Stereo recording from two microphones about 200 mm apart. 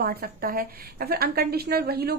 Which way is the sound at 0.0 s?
50° right (ahead or behind).